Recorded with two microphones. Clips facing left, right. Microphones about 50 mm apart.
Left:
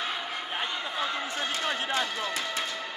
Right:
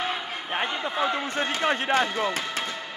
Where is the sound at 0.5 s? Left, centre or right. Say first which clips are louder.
Right 7 dB; right.